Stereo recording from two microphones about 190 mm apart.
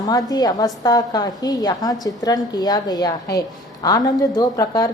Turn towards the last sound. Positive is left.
turn(degrees=20)  # may be behind; listen again after turning